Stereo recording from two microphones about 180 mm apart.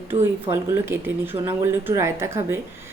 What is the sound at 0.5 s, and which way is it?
A woman's voice, 15° right (ahead or behind).